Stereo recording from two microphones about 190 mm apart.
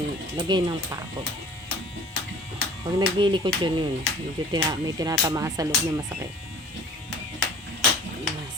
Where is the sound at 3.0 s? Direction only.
25° right (ahead or behind).